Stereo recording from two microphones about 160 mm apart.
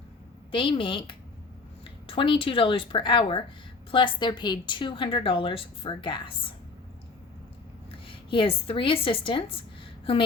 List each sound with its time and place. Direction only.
0.5 s a woman's voice: 30° left (ahead or behind)
7.9 s a woman's voice: 35° left (ahead or behind)